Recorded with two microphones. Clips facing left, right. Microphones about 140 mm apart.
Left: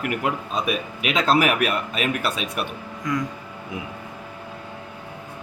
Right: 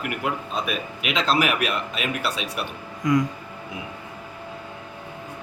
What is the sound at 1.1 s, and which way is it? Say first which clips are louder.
Speech: left 3 dB; 50° left (ahead or behind).